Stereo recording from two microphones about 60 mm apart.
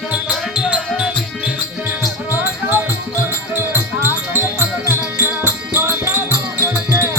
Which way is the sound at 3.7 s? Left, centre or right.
Right.